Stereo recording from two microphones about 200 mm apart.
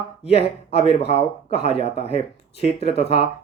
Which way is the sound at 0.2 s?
30° left (ahead or behind).